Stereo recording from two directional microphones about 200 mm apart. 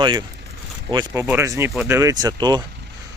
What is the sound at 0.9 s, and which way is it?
Speech, 20° right (ahead or behind).